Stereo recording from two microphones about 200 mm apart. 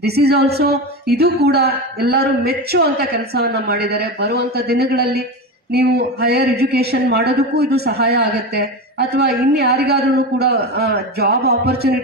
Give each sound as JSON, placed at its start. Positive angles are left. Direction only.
{"t": 0.0, "sound": "speech", "side_deg": -55}